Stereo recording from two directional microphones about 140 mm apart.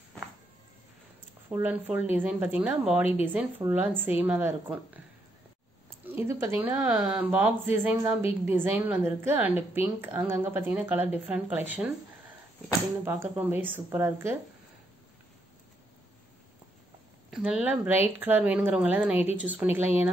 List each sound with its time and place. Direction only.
1.5 s a woman's voice: 10° right (ahead or behind)
6.0 s a woman's voice: 15° right (ahead or behind)
13.0 s a woman's voice: 15° right (ahead or behind)
17.3 s a woman's voice: 5° right (ahead or behind)